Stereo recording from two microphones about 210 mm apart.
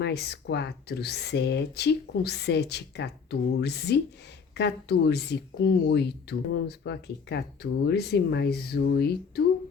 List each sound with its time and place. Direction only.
0.0 s speech: 50° left (ahead or behind)